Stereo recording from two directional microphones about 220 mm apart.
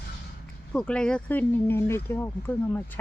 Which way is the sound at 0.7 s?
5° left (ahead or behind).